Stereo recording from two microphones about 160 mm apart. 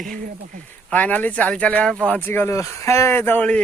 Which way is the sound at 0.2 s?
55° right (ahead or behind).